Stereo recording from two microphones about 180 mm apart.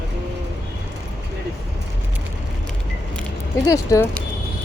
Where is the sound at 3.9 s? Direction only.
20° left (ahead or behind).